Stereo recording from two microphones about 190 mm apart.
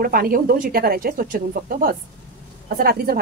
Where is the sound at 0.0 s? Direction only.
50° right (ahead or behind).